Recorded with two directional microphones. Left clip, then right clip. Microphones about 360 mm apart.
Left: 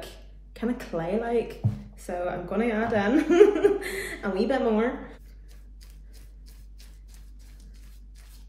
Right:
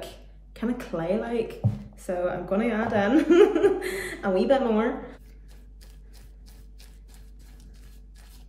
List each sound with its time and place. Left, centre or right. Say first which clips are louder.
0.0 s speech: right 2 dB; centre